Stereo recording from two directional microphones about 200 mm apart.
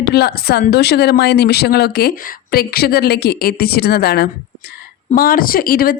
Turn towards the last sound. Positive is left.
turn(degrees=50)  # may be behind; listen again after turning